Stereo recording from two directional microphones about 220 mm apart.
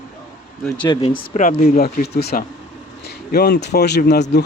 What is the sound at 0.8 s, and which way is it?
Speech, 20° left (ahead or behind).